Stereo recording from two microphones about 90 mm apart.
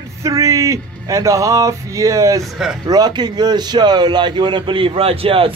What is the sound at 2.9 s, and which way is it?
A man's voice, 50° right (ahead or behind).